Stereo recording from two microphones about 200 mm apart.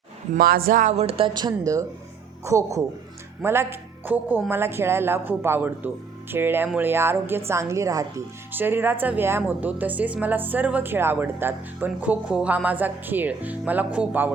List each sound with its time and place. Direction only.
0.3 s speech: 45° right (ahead or behind); by 14.3 s 10° right (ahead or behind)